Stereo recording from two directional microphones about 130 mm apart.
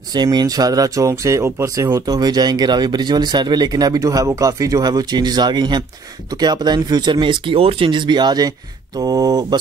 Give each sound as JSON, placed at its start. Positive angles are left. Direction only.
{"t": 0.1, "sound": "speech", "side_deg": -30}